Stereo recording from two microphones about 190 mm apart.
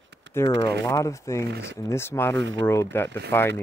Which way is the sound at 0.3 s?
65° right (ahead or behind).